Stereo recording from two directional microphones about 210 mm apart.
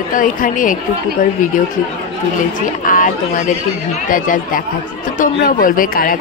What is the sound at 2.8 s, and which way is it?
A woman's voice, 40° left (ahead or behind).